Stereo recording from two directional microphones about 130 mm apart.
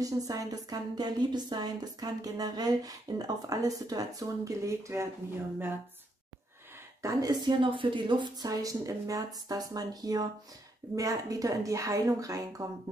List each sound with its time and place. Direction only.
0.0 s a woman's voice: 25° right (ahead or behind)
7.0 s a woman's voice: 30° right (ahead or behind)